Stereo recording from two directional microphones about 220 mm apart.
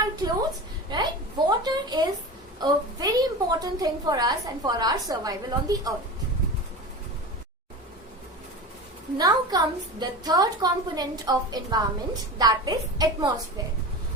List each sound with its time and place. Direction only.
0.2 s a woman's voice: 15° right (ahead or behind)
1.5 s a sound: 20° right (ahead or behind)
2.6 s a woman's voice: 15° right (ahead or behind)
9.1 s a woman's voice: 15° right (ahead or behind)